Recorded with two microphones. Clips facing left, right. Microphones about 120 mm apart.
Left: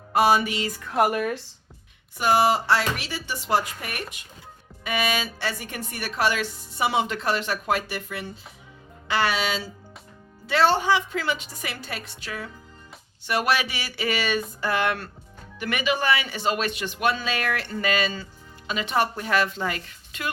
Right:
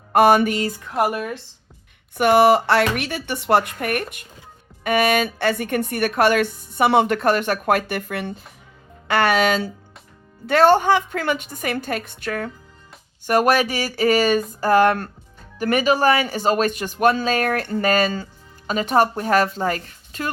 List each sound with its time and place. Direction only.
0.1 s speech: 55° right (ahead or behind)
0.9 s a woman's voice: 15° right (ahead or behind)
2.1 s a woman's voice: 60° right (ahead or behind); by 20.3 s 40° right (ahead or behind)